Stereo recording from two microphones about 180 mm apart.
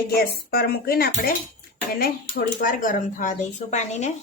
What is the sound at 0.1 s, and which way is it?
A woman's voice, 60° left (ahead or behind).